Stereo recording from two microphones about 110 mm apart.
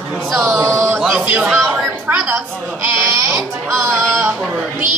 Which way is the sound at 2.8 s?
25° right (ahead or behind).